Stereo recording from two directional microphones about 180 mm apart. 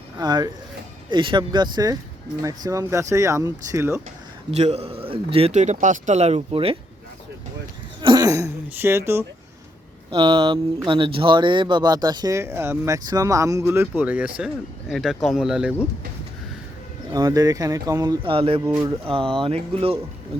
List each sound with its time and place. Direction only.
0.2 s speech: 20° right (ahead or behind)
4.5 s speech: 35° right (ahead or behind)
8.0 s speech: 20° right (ahead or behind)
10.1 s speech: 30° right (ahead or behind); by 15.7 s 5° right (ahead or behind)
17.2 s speech: 20° right (ahead or behind)
18.6 s speech: 15° right (ahead or behind)
18.9 s speech: 30° right (ahead or behind)